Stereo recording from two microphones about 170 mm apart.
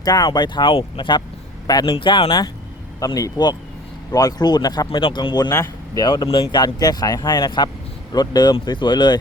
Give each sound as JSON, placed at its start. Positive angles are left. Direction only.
{"t": 0.0, "sound": "a man's voice", "side_deg": 25}